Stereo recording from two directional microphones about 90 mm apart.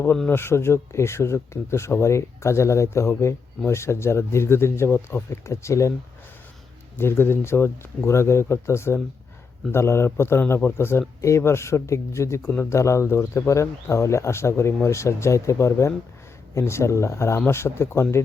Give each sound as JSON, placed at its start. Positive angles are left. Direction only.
{"t": 0.3, "sound": "speech", "side_deg": 25}
{"t": 6.9, "sound": "speech", "side_deg": 25}